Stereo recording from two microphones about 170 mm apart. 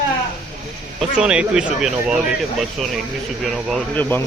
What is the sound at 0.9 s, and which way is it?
Speech, 5° right (ahead or behind).